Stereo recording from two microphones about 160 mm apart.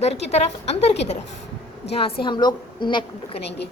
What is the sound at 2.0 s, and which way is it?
A woman's voice, 35° left (ahead or behind).